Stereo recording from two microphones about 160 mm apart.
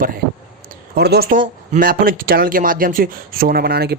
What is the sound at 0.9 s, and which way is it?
Speech, 90° right.